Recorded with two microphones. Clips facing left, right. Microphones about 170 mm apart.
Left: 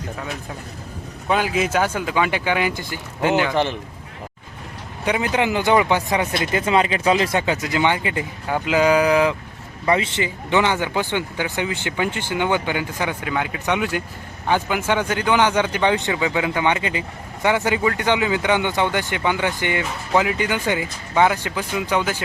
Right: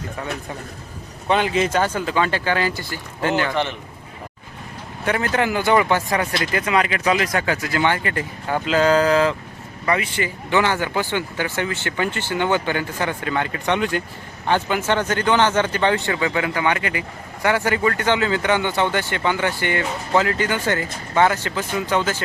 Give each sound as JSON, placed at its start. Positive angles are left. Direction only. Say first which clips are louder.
{"t": 1.3, "sound": "speech", "louder": "right 1 dB", "side_deg": 5}
{"t": 5.0, "sound": "speech", "louder": "even", "side_deg": 15}
{"t": 9.8, "sound": "speech", "louder": "left 2 dB", "side_deg": 25}